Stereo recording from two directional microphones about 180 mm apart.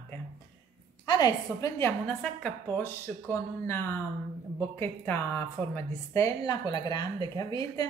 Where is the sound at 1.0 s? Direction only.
20° left (ahead or behind).